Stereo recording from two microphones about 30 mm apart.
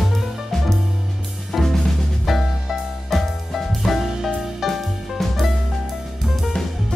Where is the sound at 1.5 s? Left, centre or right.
Centre.